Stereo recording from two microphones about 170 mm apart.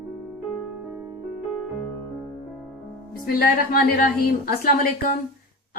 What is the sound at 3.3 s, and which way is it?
A woman's voice, 60° left (ahead or behind).